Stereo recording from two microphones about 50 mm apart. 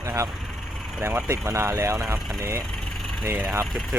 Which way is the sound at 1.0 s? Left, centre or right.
Right.